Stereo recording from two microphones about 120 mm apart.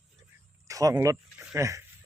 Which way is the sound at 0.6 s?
30° right (ahead or behind).